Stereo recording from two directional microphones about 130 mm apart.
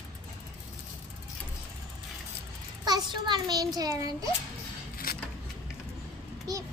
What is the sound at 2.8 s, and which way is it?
A child's voice, 35° right (ahead or behind).